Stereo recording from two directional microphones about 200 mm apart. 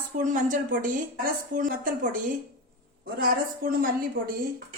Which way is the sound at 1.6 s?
40° right (ahead or behind).